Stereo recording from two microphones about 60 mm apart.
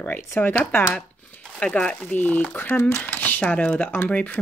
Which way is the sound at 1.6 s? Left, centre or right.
Centre.